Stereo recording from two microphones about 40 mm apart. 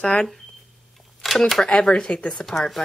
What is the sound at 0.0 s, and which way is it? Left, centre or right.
Speech, centre.